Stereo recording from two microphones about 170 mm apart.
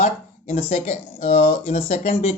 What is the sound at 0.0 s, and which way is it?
Speech, 40° left (ahead or behind).